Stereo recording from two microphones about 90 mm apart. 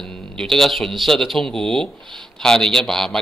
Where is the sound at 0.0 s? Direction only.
5° left (ahead or behind).